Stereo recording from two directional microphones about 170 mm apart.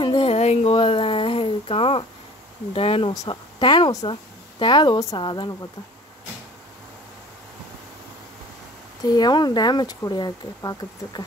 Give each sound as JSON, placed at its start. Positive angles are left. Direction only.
{"t": 0.0, "sound": "a sound", "side_deg": 30}
{"t": 2.7, "sound": "speech", "side_deg": 35}
{"t": 9.0, "sound": "speech", "side_deg": 25}